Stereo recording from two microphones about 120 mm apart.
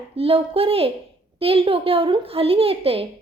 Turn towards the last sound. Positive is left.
turn(degrees=-50)  # may be behind; listen again after turning